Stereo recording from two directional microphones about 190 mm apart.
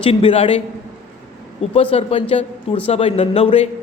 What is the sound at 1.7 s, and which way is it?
A man's voice, 30° left (ahead or behind).